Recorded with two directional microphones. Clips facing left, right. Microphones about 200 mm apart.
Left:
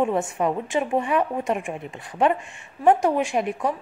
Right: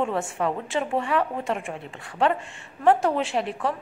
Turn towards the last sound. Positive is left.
turn(degrees=15)  # may be behind; listen again after turning